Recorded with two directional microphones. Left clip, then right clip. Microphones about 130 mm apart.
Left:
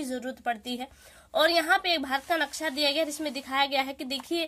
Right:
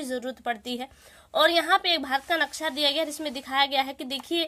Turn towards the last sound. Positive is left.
turn(degrees=-20)  # may be behind; listen again after turning